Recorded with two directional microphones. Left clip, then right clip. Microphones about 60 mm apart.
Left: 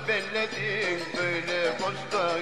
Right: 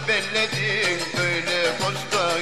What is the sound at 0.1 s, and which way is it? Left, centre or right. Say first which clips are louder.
Music: right 6 dB; right.